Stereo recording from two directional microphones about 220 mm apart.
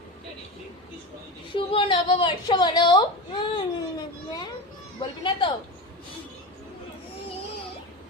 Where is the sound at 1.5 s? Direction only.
25° left (ahead or behind).